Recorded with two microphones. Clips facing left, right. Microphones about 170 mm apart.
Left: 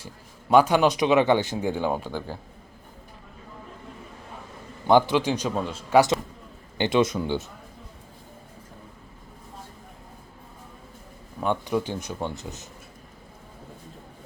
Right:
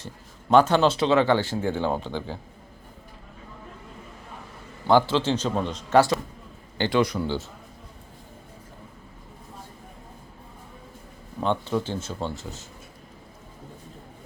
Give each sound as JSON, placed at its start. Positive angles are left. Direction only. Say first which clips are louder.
{"t": 0.5, "sound": "speech", "louder": "even", "side_deg": 10}
{"t": 4.9, "sound": "speech", "louder": "left 1 dB", "side_deg": 15}
{"t": 6.7, "sound": "a man's voice", "louder": "left 1 dB", "side_deg": 20}
{"t": 11.4, "sound": "speech", "louder": "even", "side_deg": 15}